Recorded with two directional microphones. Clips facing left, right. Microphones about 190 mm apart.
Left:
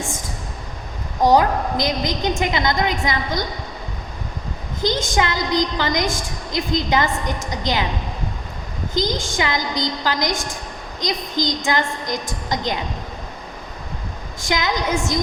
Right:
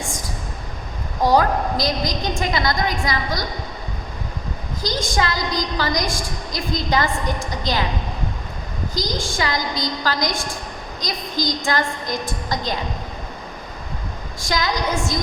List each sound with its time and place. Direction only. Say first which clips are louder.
1.2 s a woman's voice: left 2 dB; 20° left (ahead or behind)
4.8 s a woman's voice: left 3 dB; 20° left (ahead or behind)
9.2 s a woman's voice: left 1 dB; 20° left (ahead or behind)
14.4 s a woman's voice: left 1 dB; 20° left (ahead or behind)